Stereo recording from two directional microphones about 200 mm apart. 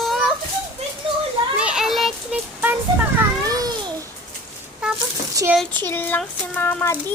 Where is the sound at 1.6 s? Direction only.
5° right (ahead or behind).